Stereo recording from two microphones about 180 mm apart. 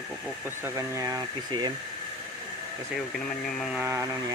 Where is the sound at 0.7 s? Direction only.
15° right (ahead or behind).